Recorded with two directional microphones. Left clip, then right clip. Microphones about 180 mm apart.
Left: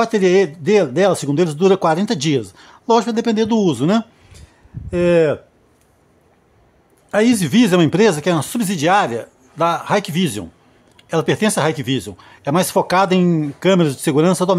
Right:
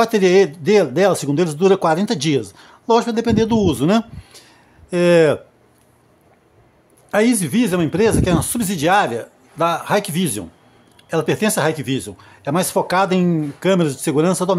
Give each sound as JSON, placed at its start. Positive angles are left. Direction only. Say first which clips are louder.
{"t": 0.0, "sound": "speech", "louder": "right 1 dB", "side_deg": 0}
{"t": 7.1, "sound": "a man's voice", "louder": "left 1 dB", "side_deg": 5}
{"t": 7.3, "sound": "speech", "louder": "left 4 dB", "side_deg": 20}